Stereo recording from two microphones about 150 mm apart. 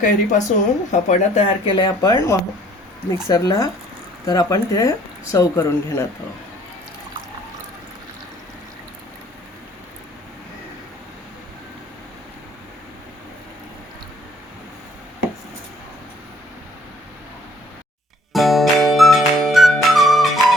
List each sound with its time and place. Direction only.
0.0 s speech: 55° left (ahead or behind)
1.6 s speech: 30° left (ahead or behind)
18.3 s music: centre (ahead or behind)